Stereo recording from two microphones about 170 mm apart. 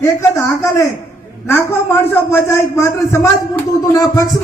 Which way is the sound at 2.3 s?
15° left (ahead or behind).